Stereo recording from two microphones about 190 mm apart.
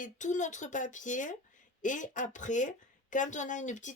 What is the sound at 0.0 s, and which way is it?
Speech, 40° left (ahead or behind).